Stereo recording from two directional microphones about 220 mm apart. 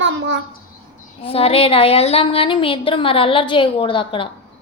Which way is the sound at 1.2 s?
25° left (ahead or behind).